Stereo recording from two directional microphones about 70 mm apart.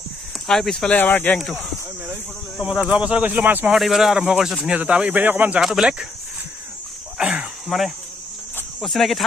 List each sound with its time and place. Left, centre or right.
0.5 s speech: centre
0.8 s speech: left
2.6 s speech: centre
3.7 s speech: centre
5.1 s speech: right
5.6 s speech: centre
7.7 s speech: centre